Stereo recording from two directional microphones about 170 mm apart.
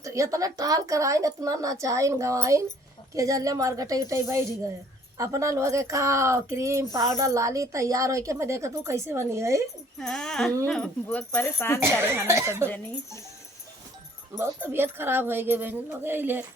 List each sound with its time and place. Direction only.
0.0 s a woman's voice: 20° right (ahead or behind)
10.0 s speech: 5° left (ahead or behind)
11.8 s speech: 15° right (ahead or behind)
14.3 s speech: 15° right (ahead or behind)